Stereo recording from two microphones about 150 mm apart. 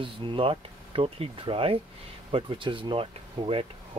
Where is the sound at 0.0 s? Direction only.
35° right (ahead or behind).